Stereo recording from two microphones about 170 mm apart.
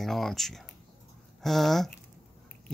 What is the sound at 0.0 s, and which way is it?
Speech, centre (ahead or behind).